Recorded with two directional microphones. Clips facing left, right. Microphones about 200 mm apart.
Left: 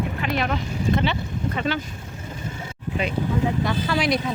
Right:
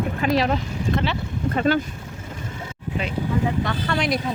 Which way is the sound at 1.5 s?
45° right (ahead or behind).